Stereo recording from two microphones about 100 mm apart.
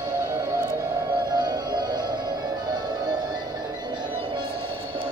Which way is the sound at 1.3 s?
45° right (ahead or behind).